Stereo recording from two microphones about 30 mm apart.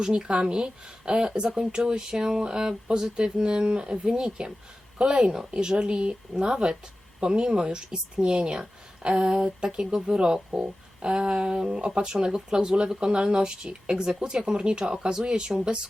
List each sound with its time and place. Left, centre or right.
0.0 s a woman's voice: right
10.5 s speech: right